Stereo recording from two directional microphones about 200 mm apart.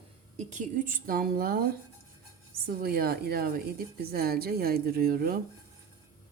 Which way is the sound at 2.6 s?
50° right (ahead or behind).